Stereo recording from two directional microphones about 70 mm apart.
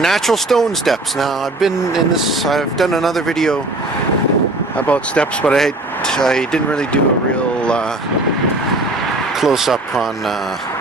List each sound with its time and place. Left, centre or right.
0.0 s speech: centre
4.9 s speech: centre
5.5 s speech: centre
9.4 s speech: centre